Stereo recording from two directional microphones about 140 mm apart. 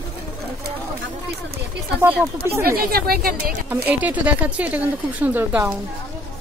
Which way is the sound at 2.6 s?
90° right.